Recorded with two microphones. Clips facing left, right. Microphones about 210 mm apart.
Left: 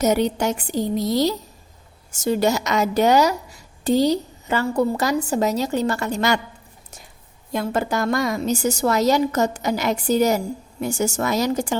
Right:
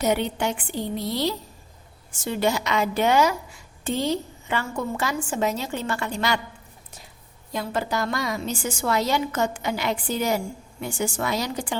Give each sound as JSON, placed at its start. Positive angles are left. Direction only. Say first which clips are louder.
{"t": 0.0, "sound": "a woman's voice", "louder": "left 4 dB", "side_deg": 40}
{"t": 7.5, "sound": "a woman's voice", "louder": "left 4 dB", "side_deg": 50}